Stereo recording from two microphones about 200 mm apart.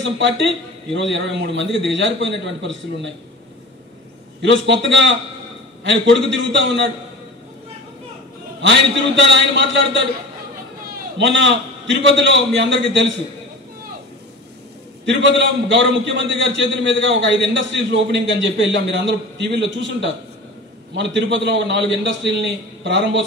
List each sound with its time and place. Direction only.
0.9 s a man's voice: 60° right (ahead or behind)
4.4 s a man's voice: 65° right (ahead or behind)
8.5 s a man's voice: 65° right (ahead or behind)
11.1 s a man's voice: 65° right (ahead or behind)
15.0 s a man's voice: 65° right (ahead or behind)